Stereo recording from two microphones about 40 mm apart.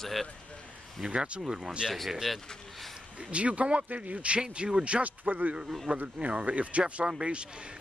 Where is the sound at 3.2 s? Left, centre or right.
Right.